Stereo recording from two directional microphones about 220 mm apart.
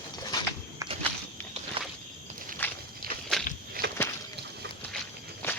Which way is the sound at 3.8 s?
40° right (ahead or behind).